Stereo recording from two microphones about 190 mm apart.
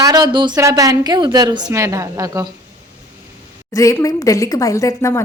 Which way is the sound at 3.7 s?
15° left (ahead or behind).